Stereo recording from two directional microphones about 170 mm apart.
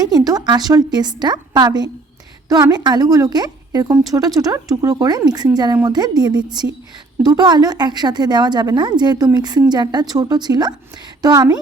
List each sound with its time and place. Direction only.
0.0 s a woman's voice: 20° right (ahead or behind)